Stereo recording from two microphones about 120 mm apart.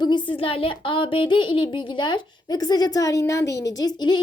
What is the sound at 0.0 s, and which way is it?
A woman's voice, 40° left (ahead or behind).